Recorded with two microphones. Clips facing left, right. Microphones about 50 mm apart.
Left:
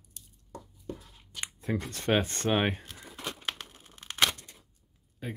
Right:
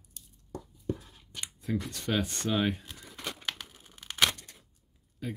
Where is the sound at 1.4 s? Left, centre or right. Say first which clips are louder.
Left 1 dB; left.